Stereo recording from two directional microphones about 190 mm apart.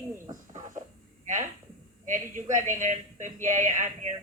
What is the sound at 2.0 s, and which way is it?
A woman's voice, 40° right (ahead or behind).